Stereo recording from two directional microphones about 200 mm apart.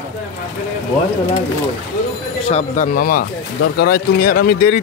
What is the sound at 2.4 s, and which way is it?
Speech, 35° left (ahead or behind).